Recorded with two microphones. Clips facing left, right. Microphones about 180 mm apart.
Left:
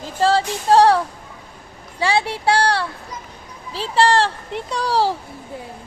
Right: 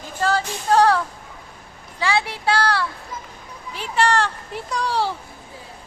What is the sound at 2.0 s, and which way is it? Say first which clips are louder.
A child's voice: left 3 dB; 30° left (ahead or behind).